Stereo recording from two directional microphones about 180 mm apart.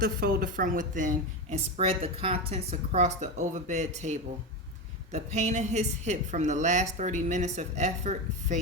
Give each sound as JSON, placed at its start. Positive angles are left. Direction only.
{"t": 0.0, "sound": "a woman's voice", "side_deg": -55}